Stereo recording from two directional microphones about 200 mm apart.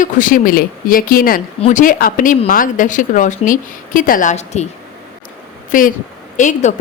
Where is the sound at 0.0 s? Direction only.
40° left (ahead or behind).